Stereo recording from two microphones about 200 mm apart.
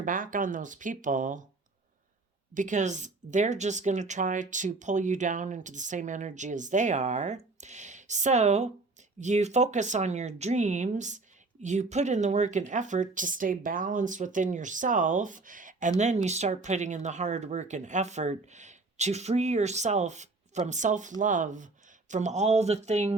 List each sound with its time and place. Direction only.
0.0 s a woman's voice: 40° right (ahead or behind)
2.6 s a woman's voice: 40° right (ahead or behind)